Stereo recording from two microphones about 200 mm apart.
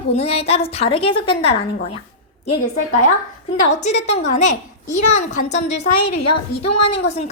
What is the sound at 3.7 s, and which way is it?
A woman's voice, 35° left (ahead or behind).